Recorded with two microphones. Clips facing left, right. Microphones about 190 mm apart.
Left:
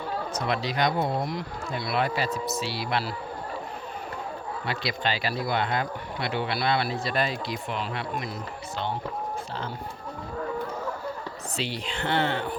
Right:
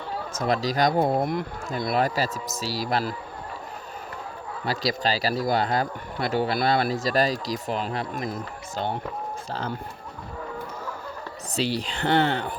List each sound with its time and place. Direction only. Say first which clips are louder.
0.3 s speech: right 5 dB; 40° right (ahead or behind)
4.6 s speech: right 5 dB; 40° right (ahead or behind)
11.5 s speech: right 6 dB; 40° right (ahead or behind)